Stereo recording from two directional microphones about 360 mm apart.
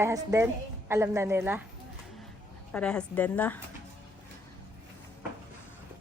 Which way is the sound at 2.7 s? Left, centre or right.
Centre.